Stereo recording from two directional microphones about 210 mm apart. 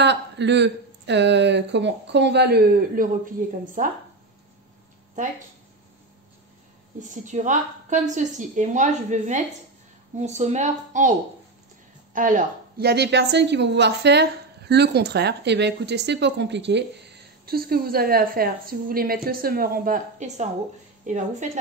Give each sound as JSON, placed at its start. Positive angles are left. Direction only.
{"t": 0.0, "sound": "speech", "side_deg": -55}
{"t": 3.8, "sound": "a woman's voice", "side_deg": -40}
{"t": 7.0, "sound": "a woman's voice", "side_deg": -35}